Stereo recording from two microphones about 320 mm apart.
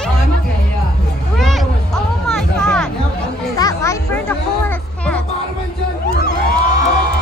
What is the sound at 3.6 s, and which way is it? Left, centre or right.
Music, centre.